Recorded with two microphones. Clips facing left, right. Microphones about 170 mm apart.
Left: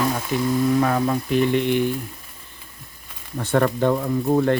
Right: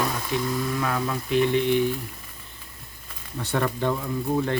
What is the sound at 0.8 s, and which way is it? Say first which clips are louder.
Speech: left 6 dB; 45° left (ahead or behind).